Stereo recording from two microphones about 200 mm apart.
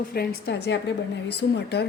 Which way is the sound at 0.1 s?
50° left (ahead or behind).